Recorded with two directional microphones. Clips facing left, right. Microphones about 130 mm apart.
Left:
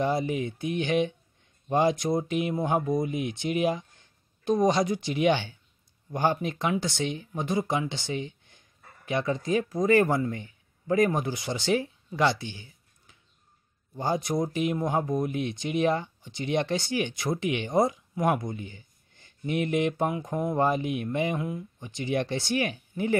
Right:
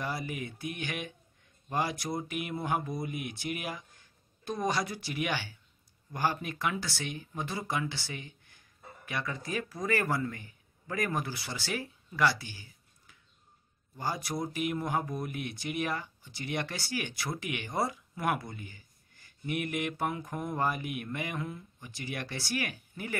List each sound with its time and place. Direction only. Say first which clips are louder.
0.0 s speech: left 10 dB; 25° left (ahead or behind)